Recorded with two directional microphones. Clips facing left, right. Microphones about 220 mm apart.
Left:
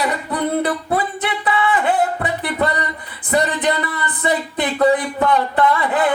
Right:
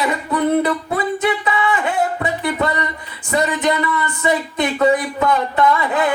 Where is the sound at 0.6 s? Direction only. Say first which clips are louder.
Even; 35° left (ahead or behind).